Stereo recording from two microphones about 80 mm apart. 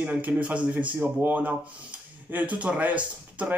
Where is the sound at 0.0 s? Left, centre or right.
Centre.